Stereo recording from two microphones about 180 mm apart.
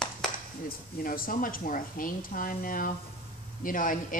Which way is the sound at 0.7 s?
55° left (ahead or behind).